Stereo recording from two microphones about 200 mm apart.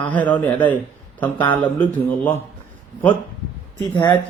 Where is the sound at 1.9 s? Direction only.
10° left (ahead or behind).